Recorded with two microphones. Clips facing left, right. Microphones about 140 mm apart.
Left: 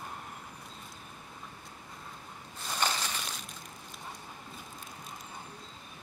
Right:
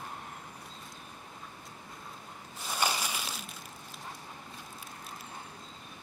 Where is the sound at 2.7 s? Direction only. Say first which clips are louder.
Right 1 dB; 10° right (ahead or behind).